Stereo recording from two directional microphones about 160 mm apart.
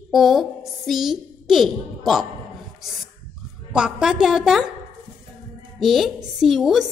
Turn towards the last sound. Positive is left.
turn(degrees=0)  # may be behind; listen again after turning